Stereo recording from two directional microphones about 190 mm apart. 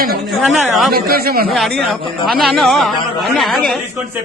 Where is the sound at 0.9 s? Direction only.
55° right (ahead or behind).